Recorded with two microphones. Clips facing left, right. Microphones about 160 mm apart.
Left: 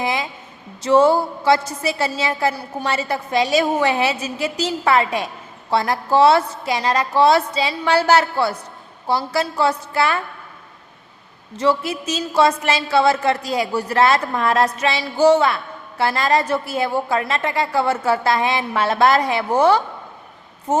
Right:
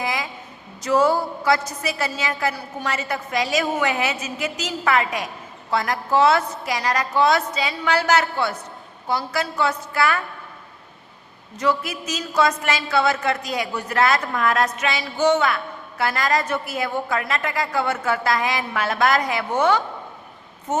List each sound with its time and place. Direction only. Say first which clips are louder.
0.0 s a sound: left 4 dB; 25° left (ahead or behind)
0.8 s a woman's voice: left 4 dB; 25° left (ahead or behind)
11.5 s a woman's voice: left 4 dB; 30° left (ahead or behind)